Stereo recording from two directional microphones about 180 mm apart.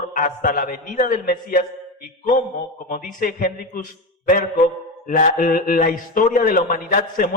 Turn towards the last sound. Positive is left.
turn(degrees=50)  # may be behind; listen again after turning